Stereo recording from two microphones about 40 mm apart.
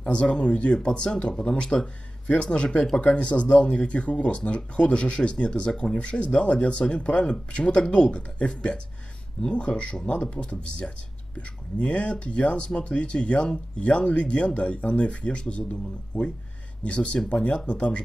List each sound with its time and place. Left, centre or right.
0.0 s speech: left
0.8 s speech: left
16.8 s speech: left